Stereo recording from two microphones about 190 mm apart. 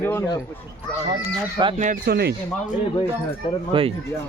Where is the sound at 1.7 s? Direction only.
45° right (ahead or behind).